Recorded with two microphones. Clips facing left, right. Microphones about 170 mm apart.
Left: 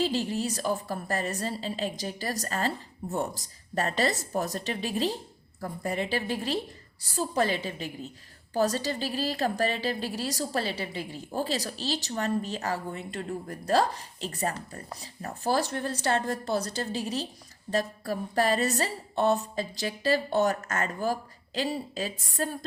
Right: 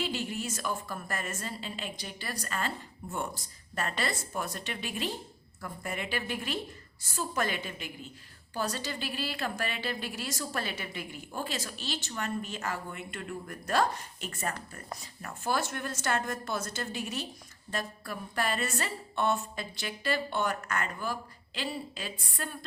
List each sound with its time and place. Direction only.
0.0 s a woman's voice: 35° left (ahead or behind)